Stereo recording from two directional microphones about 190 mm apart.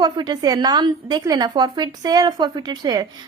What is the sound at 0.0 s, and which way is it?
A woman's voice, 20° right (ahead or behind).